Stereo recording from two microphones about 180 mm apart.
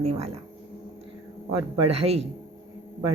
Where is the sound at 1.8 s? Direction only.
35° right (ahead or behind).